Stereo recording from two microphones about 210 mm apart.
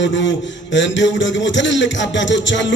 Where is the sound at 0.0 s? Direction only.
60° left (ahead or behind).